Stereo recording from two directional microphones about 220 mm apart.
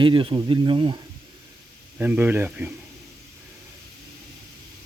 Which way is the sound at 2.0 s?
10° right (ahead or behind).